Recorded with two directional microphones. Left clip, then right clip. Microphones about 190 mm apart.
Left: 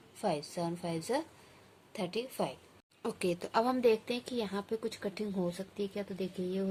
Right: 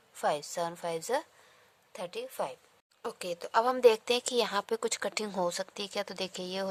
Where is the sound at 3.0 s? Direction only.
30° right (ahead or behind).